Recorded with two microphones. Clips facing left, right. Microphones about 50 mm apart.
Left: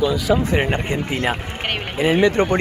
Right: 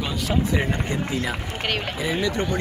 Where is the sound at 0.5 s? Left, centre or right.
Left.